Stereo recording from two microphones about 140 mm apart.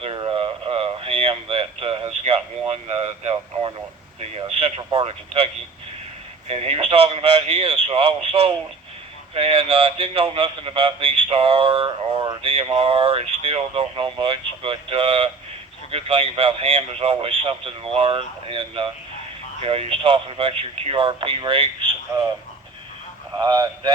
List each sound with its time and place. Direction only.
0.0 s a sound: 35° right (ahead or behind)
4.2 s speech: 45° right (ahead or behind)
6.5 s a man's voice: 45° right (ahead or behind)
22.1 s speech: 15° right (ahead or behind)
23.3 s speech: 30° right (ahead or behind)